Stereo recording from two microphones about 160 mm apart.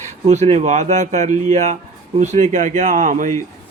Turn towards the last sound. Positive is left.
turn(degrees=-50)  # may be behind; listen again after turning